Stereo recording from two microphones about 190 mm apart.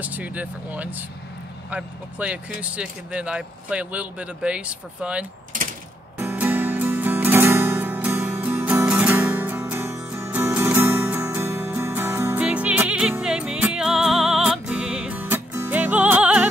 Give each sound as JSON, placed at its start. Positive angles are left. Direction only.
{"t": 0.0, "sound": "speech", "side_deg": -10}
{"t": 5.5, "sound": "mechanisms", "side_deg": -45}
{"t": 6.1, "sound": "music", "side_deg": -10}